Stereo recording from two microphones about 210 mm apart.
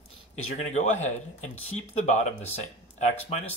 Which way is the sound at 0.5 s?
35° left (ahead or behind).